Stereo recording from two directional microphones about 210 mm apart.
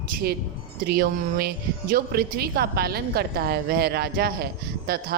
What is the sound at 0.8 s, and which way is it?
A woman's voice, 45° right (ahead or behind).